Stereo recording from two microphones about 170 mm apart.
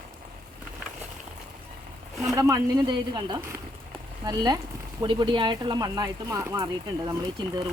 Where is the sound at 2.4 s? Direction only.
20° right (ahead or behind).